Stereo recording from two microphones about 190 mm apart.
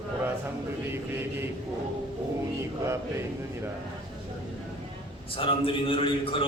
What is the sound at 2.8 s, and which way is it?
Mantra, 15° right (ahead or behind).